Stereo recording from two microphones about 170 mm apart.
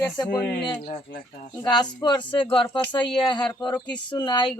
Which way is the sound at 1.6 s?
25° left (ahead or behind).